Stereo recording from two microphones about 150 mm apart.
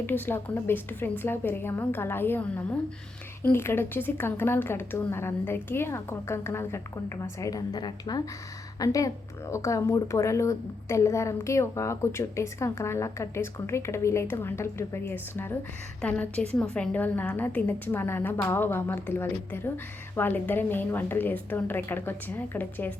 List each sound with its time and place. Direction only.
0.0 s a woman's voice: 15° left (ahead or behind)